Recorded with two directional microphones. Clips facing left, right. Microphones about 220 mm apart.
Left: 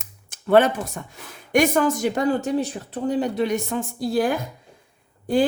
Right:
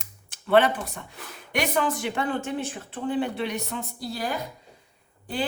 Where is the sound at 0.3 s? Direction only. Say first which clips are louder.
Left 4 dB; 45° left (ahead or behind).